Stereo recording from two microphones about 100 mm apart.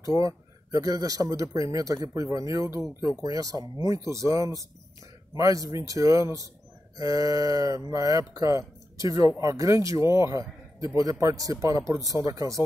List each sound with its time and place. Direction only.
0.2 s speech: 35° right (ahead or behind)